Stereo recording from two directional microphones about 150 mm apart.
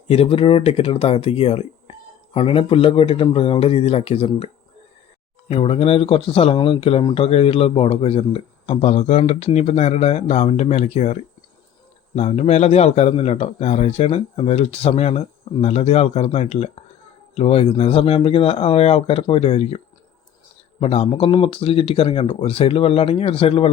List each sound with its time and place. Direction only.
0.1 s speech: 40° left (ahead or behind)
5.5 s a man's voice: 40° left (ahead or behind)